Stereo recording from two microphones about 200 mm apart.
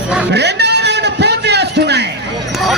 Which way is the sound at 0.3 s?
60° right (ahead or behind).